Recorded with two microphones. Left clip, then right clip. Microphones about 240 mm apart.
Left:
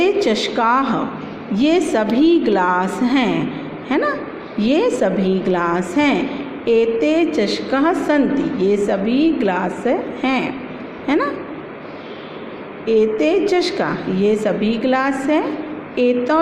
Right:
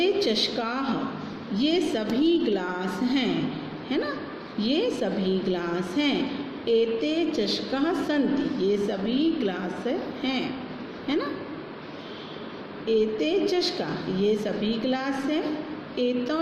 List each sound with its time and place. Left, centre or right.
0.0 s a woman's voice: left
12.9 s a woman's voice: left